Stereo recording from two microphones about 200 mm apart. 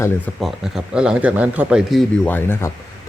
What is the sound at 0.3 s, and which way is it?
A man's voice, centre (ahead or behind).